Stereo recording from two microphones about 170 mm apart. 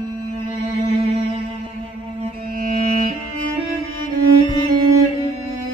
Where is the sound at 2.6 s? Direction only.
55° right (ahead or behind).